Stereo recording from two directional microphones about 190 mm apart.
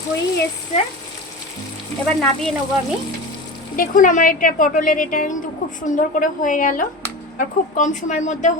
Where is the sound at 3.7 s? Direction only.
45° left (ahead or behind).